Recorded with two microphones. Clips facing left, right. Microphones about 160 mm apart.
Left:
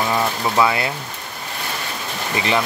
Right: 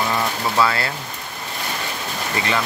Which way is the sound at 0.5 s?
15° left (ahead or behind).